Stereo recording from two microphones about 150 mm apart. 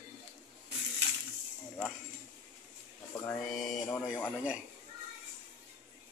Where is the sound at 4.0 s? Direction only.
15° left (ahead or behind).